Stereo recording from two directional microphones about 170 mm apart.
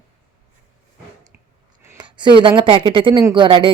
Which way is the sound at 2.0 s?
25° right (ahead or behind).